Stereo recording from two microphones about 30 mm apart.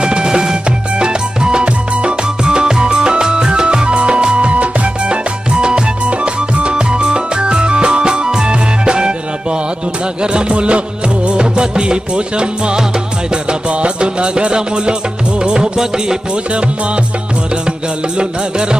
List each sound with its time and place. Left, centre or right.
0.0 s music: right
5.1 s music: right
10.2 s music: right
17.6 s music: right